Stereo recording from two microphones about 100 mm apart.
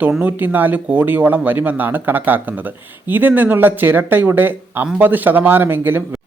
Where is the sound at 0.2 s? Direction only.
20° right (ahead or behind).